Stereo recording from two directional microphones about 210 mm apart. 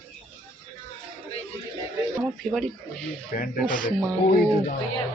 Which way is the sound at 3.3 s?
40° left (ahead or behind).